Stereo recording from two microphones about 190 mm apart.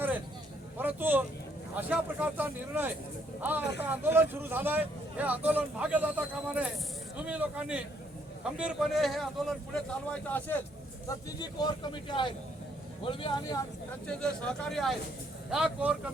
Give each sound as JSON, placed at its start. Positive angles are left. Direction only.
{"t": 0.8, "sound": "a man's voice", "side_deg": -10}
{"t": 11.3, "sound": "speech", "side_deg": 25}
{"t": 14.1, "sound": "a man's voice", "side_deg": 5}